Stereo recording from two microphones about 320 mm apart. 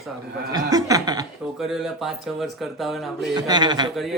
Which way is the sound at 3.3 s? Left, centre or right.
Centre.